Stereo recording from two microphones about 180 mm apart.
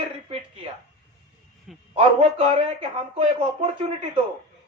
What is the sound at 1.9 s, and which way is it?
A man's voice, 35° right (ahead or behind).